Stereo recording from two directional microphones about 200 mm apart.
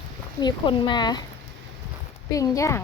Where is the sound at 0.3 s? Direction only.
20° left (ahead or behind).